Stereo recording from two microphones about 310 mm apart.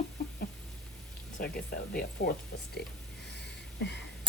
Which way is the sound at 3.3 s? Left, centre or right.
Left.